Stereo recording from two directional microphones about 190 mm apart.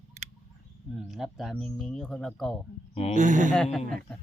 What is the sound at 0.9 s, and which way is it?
Speech, centre (ahead or behind).